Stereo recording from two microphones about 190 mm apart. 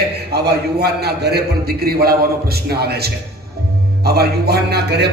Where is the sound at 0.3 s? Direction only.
55° right (ahead or behind).